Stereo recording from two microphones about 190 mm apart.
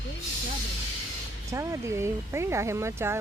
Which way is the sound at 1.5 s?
15° right (ahead or behind).